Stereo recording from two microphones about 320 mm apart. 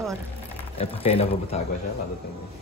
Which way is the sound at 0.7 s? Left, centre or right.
Centre.